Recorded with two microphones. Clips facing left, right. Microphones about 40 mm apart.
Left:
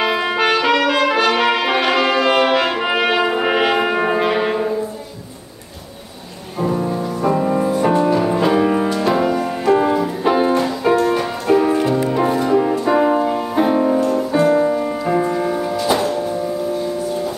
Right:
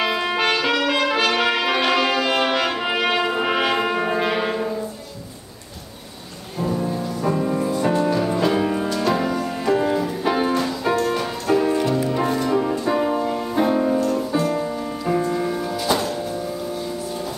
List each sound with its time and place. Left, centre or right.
0.0 s trumpet: centre
6.6 s music: centre
14.4 s music: left; by 16.2 s centre